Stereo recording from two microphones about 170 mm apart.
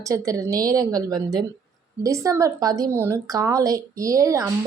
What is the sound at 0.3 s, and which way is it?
A woman's voice, 20° right (ahead or behind).